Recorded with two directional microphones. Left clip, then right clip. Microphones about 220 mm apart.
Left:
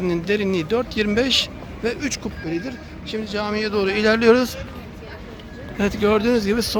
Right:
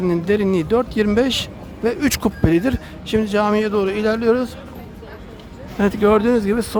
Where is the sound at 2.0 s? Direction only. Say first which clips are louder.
Right 8 dB; 35° right (ahead or behind); by 4.4 s 5° left (ahead or behind).